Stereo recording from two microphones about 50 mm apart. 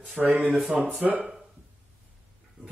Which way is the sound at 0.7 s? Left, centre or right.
Right.